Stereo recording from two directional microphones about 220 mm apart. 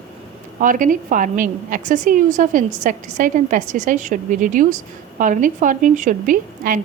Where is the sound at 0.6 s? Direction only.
35° right (ahead or behind).